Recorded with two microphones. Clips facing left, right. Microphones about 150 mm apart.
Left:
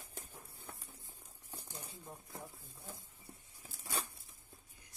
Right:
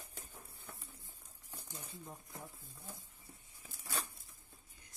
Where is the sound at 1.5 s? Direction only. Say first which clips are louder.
Left 2 dB; 30° left (ahead or behind).